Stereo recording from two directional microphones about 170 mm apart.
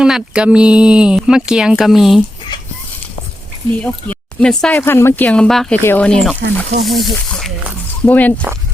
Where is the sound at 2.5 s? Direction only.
25° left (ahead or behind).